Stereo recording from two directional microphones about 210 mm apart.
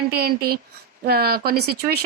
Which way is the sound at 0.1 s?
45° right (ahead or behind).